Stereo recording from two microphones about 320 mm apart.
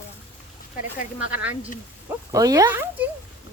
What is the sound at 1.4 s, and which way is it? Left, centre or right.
Speech, centre.